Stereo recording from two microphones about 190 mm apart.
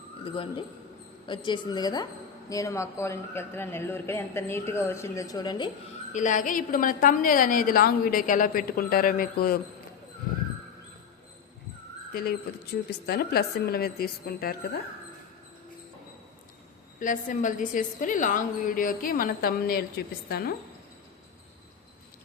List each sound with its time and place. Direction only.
0.3 s a woman's voice: 25° left (ahead or behind)
6.1 s a woman's voice: 40° left (ahead or behind)
12.1 s speech: 55° left (ahead or behind)
17.0 s a woman's voice: 45° left (ahead or behind)